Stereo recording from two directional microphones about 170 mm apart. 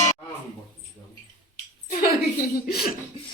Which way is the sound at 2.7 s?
65° left (ahead or behind).